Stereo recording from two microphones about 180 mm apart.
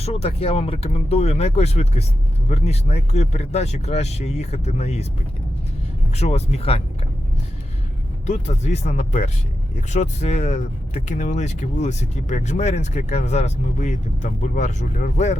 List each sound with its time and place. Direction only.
0.0 s speech: 35° left (ahead or behind)
6.1 s speech: 35° left (ahead or behind)
8.3 s speech: 40° left (ahead or behind)